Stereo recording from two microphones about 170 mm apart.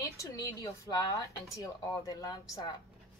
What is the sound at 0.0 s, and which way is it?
Speech, 20° left (ahead or behind).